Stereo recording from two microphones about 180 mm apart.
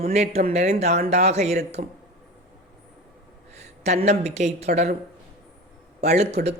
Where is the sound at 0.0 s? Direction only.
35° right (ahead or behind).